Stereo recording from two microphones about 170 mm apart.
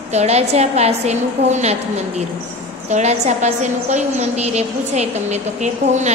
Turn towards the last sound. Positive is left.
turn(degrees=-45)  # may be behind; listen again after turning